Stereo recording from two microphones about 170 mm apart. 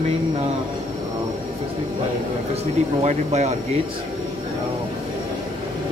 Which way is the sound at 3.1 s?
40° right (ahead or behind).